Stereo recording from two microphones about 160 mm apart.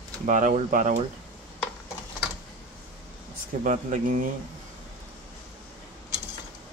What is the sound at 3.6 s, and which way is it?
Speech, 50° right (ahead or behind).